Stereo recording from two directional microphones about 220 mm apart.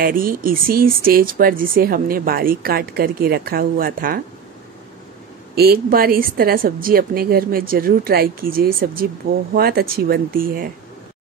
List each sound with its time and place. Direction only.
0.0 s speech: 40° right (ahead or behind)
5.6 s speech: 45° right (ahead or behind)